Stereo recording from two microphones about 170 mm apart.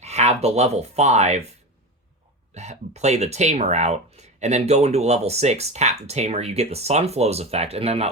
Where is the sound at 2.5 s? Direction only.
40° right (ahead or behind).